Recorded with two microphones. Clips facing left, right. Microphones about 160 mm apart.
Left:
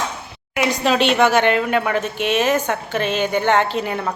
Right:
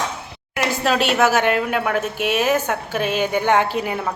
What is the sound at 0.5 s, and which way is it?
Speech, centre (ahead or behind).